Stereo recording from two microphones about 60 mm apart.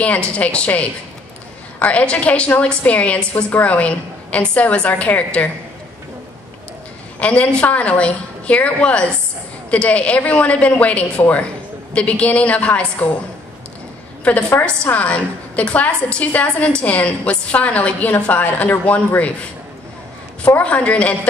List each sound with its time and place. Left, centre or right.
0.4 s a woman's voice: left
7.2 s a woman's voice: left
14.3 s a woman's voice: left
20.4 s a woman's voice: left